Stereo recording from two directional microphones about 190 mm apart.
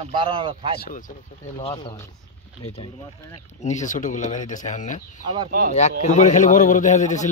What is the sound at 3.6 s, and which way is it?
Speech, 40° left (ahead or behind).